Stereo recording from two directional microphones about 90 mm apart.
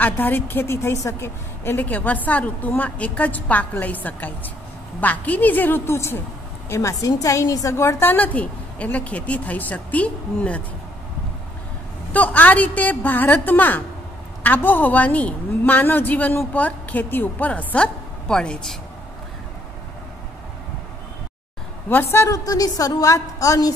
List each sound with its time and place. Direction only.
0.0 s a woman's voice: 20° left (ahead or behind)
12.1 s a woman's voice: 15° left (ahead or behind)
21.8 s a woman's voice: 20° left (ahead or behind)
22.4 s a woman's voice: 45° left (ahead or behind)